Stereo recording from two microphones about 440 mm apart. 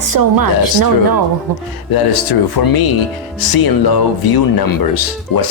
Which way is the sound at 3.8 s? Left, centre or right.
Left.